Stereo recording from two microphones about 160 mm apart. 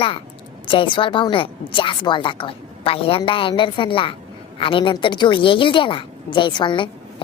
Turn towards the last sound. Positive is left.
turn(degrees=30)  # may be behind; listen again after turning